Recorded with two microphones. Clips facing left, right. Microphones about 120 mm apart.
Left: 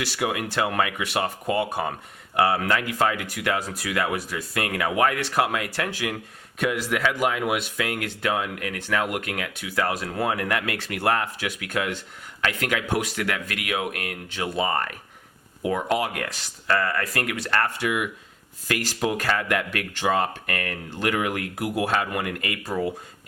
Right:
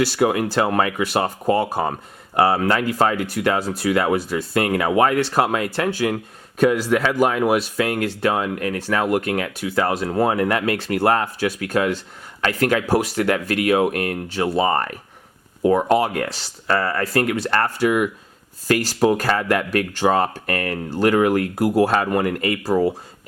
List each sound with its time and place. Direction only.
0.0 s speech: 35° right (ahead or behind)